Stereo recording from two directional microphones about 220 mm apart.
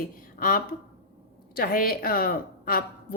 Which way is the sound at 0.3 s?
40° left (ahead or behind).